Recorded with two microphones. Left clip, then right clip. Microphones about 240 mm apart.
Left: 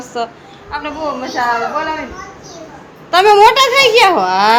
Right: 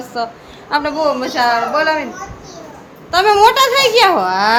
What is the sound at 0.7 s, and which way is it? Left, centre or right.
Speech, right.